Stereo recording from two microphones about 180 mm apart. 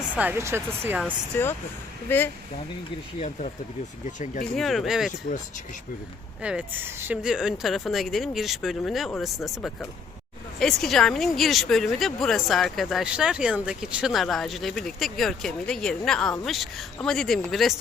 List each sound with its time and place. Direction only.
0.2 s speech: 10° right (ahead or behind)
2.0 s speech: 10° left (ahead or behind)
3.2 s speech: 35° left (ahead or behind)
4.5 s speech: centre (ahead or behind)
6.4 s speech: 5° right (ahead or behind)